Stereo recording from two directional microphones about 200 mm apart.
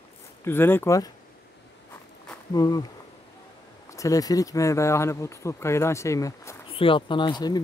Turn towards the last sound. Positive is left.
turn(degrees=20)  # may be behind; listen again after turning